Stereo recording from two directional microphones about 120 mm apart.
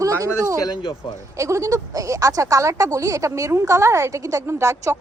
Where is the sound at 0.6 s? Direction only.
35° left (ahead or behind).